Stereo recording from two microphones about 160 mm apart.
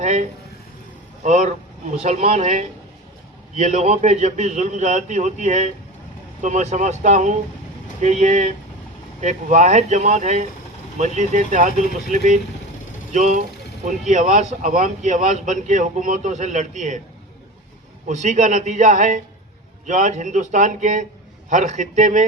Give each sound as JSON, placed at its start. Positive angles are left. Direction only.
{"t": 0.0, "sound": "speech", "side_deg": -45}
{"t": 18.1, "sound": "speech", "side_deg": -50}